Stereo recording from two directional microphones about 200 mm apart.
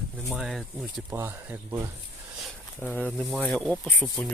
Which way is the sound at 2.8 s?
10° left (ahead or behind).